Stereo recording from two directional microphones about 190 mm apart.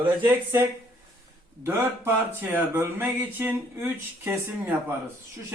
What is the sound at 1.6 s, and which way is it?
Speech, 10° right (ahead or behind).